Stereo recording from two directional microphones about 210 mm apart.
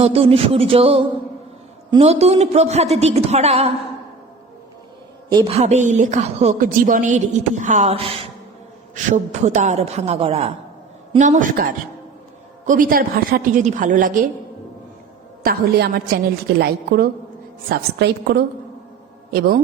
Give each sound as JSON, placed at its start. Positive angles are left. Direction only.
{"t": 0.0, "sound": "a sound", "side_deg": -30}
{"t": 1.9, "sound": "speech", "side_deg": -30}
{"t": 5.3, "sound": "speech", "side_deg": -25}
{"t": 15.4, "sound": "a woman's voice", "side_deg": -50}